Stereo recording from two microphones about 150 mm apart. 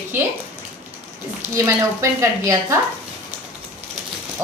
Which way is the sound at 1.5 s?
20° right (ahead or behind).